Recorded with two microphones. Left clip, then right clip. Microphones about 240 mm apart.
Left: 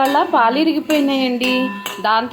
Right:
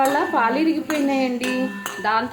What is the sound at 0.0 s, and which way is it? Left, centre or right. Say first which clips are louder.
Speech: left 5 dB; centre.